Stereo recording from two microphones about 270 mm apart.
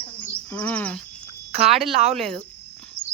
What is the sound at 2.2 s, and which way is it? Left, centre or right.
Speech, centre.